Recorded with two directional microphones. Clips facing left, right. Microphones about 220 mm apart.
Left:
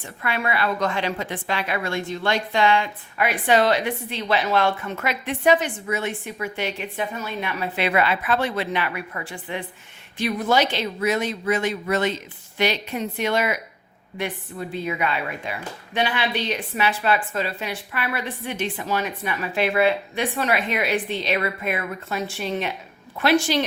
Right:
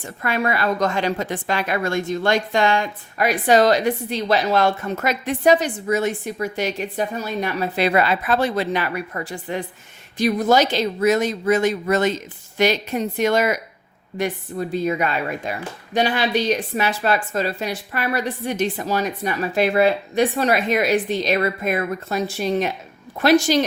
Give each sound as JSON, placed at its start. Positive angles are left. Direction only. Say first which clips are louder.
{"t": 0.0, "sound": "a woman's voice", "louder": "right 4 dB", "side_deg": -40}